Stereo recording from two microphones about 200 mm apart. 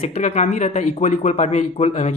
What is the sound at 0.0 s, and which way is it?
Speech, 30° left (ahead or behind).